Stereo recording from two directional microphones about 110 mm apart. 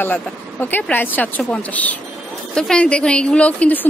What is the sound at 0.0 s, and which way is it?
A woman's voice, 15° left (ahead or behind).